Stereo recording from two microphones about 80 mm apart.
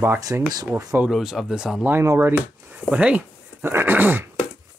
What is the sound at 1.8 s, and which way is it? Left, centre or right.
Speech, right.